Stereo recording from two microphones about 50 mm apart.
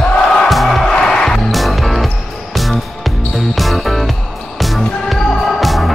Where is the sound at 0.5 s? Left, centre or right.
Centre.